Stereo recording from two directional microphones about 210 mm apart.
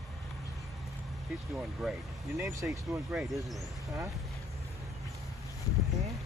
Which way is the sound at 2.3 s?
15° right (ahead or behind).